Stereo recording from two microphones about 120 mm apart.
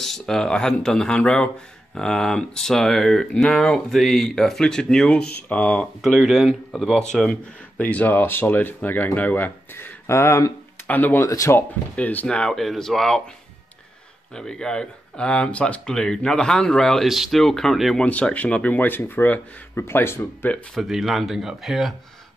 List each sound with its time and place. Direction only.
0.0 s speech: 5° left (ahead or behind)
11.2 s speech: 25° left (ahead or behind)
11.9 s speech: 15° left (ahead or behind)
14.3 s speech: 5° left (ahead or behind)
20.8 s speech: centre (ahead or behind)